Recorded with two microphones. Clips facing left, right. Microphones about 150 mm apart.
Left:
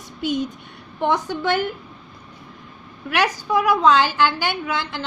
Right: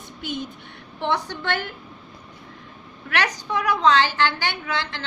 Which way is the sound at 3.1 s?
10° left (ahead or behind).